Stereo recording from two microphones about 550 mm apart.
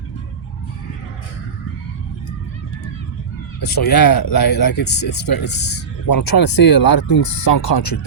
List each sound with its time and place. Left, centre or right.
3.9 s speech: left